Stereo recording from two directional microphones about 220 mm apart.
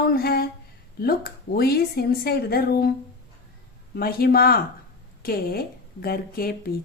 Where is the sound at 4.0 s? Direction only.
45° left (ahead or behind).